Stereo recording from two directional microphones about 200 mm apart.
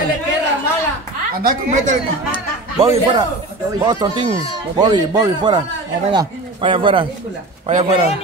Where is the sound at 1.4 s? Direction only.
40° right (ahead or behind).